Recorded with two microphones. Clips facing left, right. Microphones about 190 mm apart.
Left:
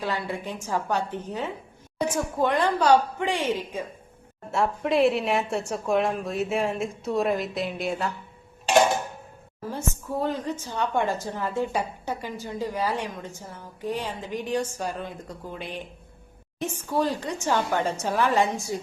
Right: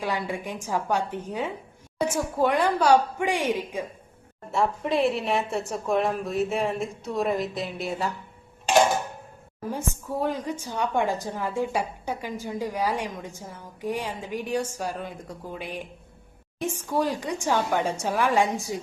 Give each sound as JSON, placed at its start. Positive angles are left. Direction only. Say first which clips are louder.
{"t": 0.0, "sound": "a woman's voice", "louder": "right 1 dB", "side_deg": -15}
{"t": 4.5, "sound": "a woman's voice", "louder": "left 1 dB", "side_deg": 0}
{"t": 9.7, "sound": "a woman's voice", "louder": "left 1 dB", "side_deg": -10}